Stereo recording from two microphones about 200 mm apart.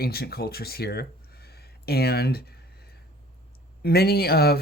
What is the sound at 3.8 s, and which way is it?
Speech, 50° left (ahead or behind).